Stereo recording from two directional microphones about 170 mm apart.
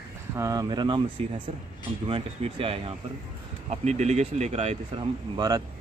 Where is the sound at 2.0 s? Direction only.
35° right (ahead or behind).